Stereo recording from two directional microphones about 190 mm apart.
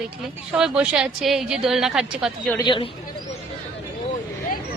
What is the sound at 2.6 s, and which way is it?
Speech, 25° left (ahead or behind).